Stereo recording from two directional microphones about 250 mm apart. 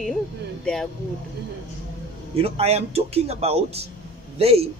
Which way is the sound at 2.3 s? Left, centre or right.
Right.